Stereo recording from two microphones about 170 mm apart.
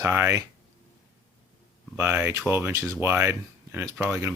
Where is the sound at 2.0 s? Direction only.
10° right (ahead or behind).